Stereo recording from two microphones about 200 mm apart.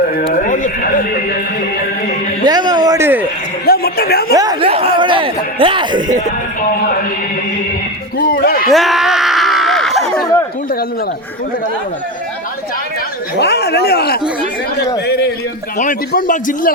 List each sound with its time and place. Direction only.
0.3 s music: 40° left (ahead or behind)
2.4 s a sound: 20° right (ahead or behind)
3.7 s a woman's voice: 50° left (ahead or behind)
4.4 s music: 20° right (ahead or behind)
8.2 s speech: 50° left (ahead or behind)
8.7 s a sound: centre (ahead or behind)
13.4 s speech: 55° left (ahead or behind)
15.8 s a man's voice: 40° left (ahead or behind)